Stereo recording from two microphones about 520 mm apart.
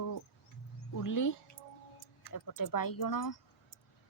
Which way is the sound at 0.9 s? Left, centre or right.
Left.